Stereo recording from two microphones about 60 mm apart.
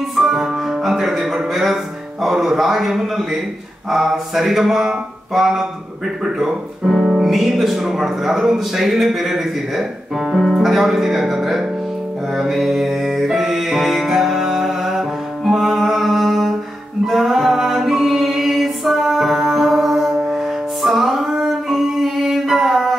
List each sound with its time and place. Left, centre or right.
0.1 s music: centre
2.2 s speech: centre
12.4 s music: centre